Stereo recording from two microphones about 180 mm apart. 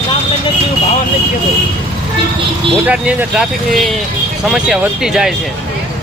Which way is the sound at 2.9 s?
5° right (ahead or behind).